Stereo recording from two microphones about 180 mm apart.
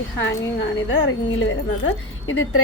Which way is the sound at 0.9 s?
90° left.